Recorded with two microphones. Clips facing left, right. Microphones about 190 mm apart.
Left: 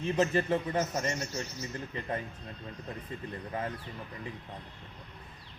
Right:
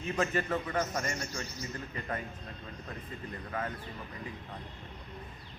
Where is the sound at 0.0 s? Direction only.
30° left (ahead or behind).